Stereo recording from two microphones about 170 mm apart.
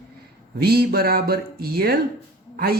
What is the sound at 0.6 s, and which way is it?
Speech, 65° right (ahead or behind).